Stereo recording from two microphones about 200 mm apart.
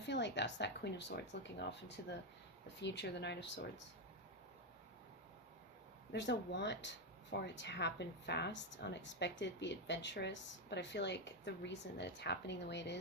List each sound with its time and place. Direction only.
0.0 s speech: 60° left (ahead or behind)
6.1 s speech: 60° left (ahead or behind)